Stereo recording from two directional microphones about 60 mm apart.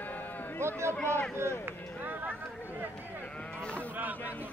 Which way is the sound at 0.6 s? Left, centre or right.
Right.